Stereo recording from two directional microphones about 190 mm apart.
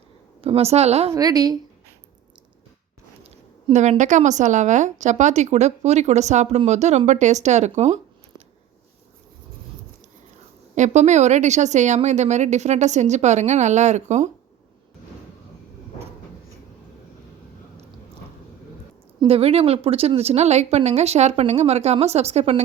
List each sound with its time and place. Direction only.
0.4 s a woman's voice: 35° right (ahead or behind)
1.1 s a woman's voice: 20° right (ahead or behind)
3.2 s a woman's voice: 40° right (ahead or behind)
10.8 s a woman's voice: 40° right (ahead or behind)
19.2 s a woman's voice: 30° right (ahead or behind)